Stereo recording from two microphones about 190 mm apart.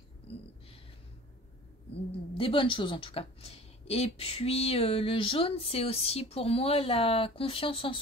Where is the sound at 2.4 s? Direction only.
30° left (ahead or behind).